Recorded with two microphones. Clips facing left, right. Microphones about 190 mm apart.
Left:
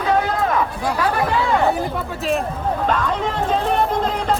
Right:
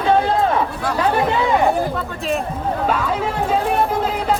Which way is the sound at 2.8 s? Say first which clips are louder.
Right 1 dB; 5° right (ahead or behind).